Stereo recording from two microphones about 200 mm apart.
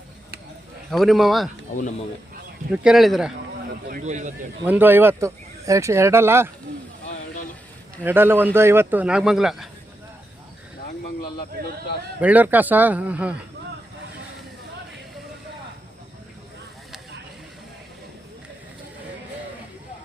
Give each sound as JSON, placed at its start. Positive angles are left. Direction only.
{"t": 0.9, "sound": "speech", "side_deg": 0}
{"t": 2.7, "sound": "speech", "side_deg": -5}
{"t": 3.8, "sound": "speech", "side_deg": -40}
{"t": 4.6, "sound": "speech", "side_deg": -10}
{"t": 8.0, "sound": "speech", "side_deg": -10}
{"t": 12.2, "sound": "speech", "side_deg": -10}